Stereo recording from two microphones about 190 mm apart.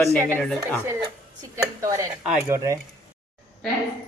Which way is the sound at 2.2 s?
5° right (ahead or behind).